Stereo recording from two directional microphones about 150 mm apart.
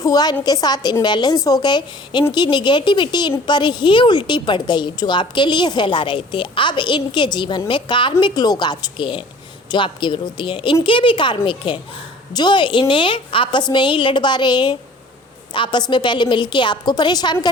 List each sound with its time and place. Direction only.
0.0 s a woman's voice: 25° left (ahead or behind)